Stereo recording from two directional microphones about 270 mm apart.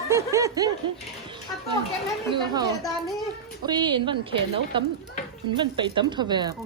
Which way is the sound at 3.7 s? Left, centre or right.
Centre.